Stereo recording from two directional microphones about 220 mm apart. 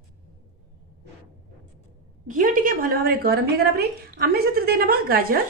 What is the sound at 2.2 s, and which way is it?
A woman's voice, 35° right (ahead or behind).